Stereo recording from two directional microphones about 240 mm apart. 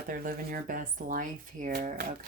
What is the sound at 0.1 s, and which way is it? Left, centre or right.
Speech, right.